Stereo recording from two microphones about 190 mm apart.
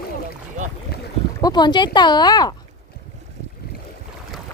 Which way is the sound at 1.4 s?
20° left (ahead or behind).